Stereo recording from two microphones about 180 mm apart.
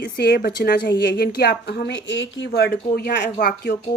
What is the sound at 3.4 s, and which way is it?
Speech, 50° left (ahead or behind).